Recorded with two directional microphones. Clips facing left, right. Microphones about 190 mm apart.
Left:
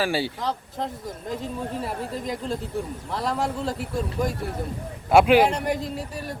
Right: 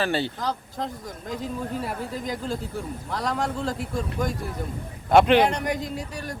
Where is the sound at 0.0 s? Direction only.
10° left (ahead or behind).